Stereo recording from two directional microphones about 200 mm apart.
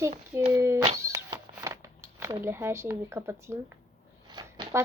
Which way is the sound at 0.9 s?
15° right (ahead or behind).